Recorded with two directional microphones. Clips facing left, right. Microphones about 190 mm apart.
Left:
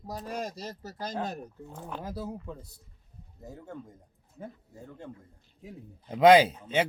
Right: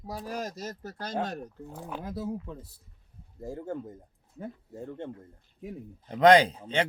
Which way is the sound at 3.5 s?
25° right (ahead or behind).